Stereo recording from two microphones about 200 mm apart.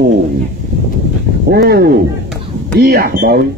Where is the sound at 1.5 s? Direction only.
50° right (ahead or behind).